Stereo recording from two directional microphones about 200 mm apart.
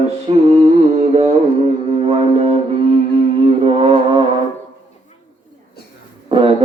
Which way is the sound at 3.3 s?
25° right (ahead or behind).